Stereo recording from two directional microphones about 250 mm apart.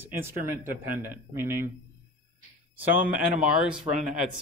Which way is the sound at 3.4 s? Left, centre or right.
Centre.